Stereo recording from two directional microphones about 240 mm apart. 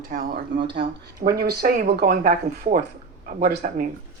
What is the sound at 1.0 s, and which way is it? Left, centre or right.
Speech, right.